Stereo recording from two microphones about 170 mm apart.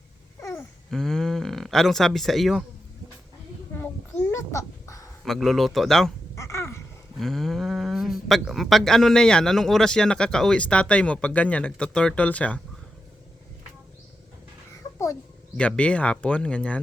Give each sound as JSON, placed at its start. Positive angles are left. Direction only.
{"t": 0.3, "sound": "babbling", "side_deg": 15}
{"t": 0.9, "sound": "speech", "side_deg": 0}
{"t": 4.3, "sound": "a sound", "side_deg": 15}
{"t": 5.2, "sound": "speech", "side_deg": 0}
{"t": 6.3, "sound": "babbling", "side_deg": 15}
{"t": 7.2, "sound": "speech", "side_deg": 0}
{"t": 15.5, "sound": "speech", "side_deg": 5}